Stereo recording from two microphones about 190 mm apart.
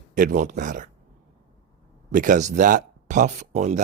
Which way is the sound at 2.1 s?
45° right (ahead or behind).